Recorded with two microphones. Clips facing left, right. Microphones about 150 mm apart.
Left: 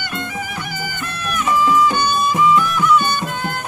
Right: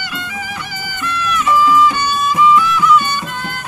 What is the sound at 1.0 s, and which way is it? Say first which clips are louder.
Music: right 6 dB; 55° left (ahead or behind).